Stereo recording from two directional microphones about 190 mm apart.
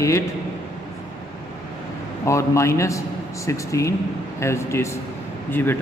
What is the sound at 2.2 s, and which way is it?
A man's voice, 15° left (ahead or behind).